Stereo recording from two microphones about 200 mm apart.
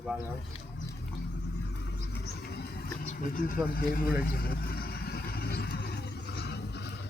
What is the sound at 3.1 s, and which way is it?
Vehicle, 45° left (ahead or behind).